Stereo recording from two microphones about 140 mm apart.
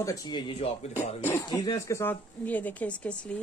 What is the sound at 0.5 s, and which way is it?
Speech, 50° left (ahead or behind).